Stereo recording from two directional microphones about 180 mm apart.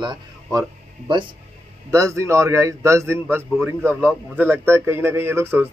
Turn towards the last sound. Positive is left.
turn(degrees=-15)  # may be behind; listen again after turning